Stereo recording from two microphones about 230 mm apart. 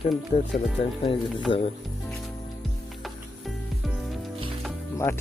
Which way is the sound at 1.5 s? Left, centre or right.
Left.